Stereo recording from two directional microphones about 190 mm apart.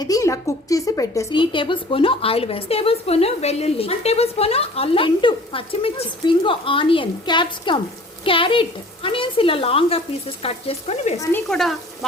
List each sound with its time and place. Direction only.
0.0 s a woman's voice: 15° left (ahead or behind)
11.2 s speech: 10° left (ahead or behind)